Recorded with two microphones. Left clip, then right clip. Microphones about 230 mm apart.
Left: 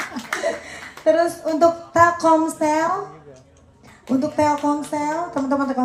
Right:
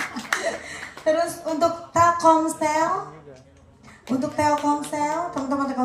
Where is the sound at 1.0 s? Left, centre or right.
Right.